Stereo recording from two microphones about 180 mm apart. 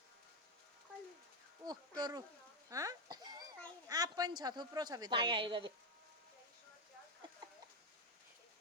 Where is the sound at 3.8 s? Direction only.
20° right (ahead or behind).